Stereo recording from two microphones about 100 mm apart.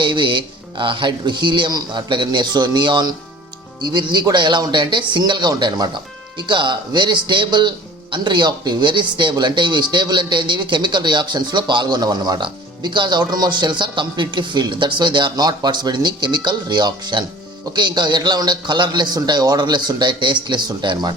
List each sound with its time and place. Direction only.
0.0 s speech: 55° right (ahead or behind)